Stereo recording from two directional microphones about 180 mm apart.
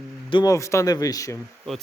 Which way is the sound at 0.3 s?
25° left (ahead or behind).